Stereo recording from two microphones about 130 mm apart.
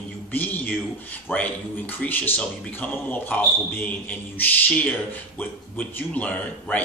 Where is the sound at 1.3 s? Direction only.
15° left (ahead or behind).